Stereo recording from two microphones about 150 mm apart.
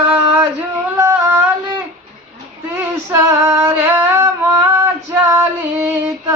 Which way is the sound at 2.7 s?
15° right (ahead or behind).